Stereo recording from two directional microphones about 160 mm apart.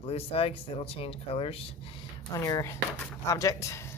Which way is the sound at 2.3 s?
20° left (ahead or behind).